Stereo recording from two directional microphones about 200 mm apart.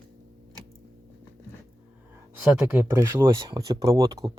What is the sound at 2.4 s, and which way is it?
Speech, 10° right (ahead or behind).